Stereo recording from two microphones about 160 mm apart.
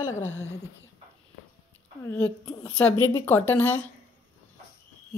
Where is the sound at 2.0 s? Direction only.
15° left (ahead or behind).